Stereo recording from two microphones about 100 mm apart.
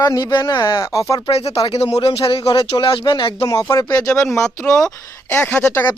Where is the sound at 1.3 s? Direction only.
85° left.